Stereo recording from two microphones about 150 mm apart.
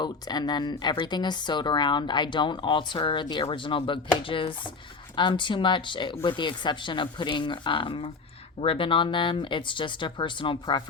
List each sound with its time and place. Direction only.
0.0 s speech: 30° left (ahead or behind)